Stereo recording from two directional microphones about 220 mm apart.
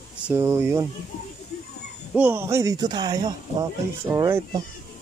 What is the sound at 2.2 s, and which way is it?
Speech, 10° right (ahead or behind).